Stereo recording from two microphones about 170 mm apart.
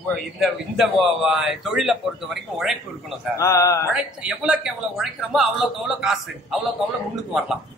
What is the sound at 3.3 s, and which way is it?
Mantra, 20° left (ahead or behind).